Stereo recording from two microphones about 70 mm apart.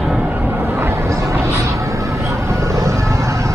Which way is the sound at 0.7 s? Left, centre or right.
Right.